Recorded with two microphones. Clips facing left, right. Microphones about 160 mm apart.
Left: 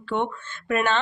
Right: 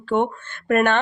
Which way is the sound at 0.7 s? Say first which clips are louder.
Right 5 dB; 55° right (ahead or behind).